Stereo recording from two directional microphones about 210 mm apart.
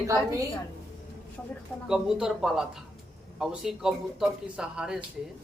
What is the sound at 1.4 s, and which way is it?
A man's voice, 5° left (ahead or behind).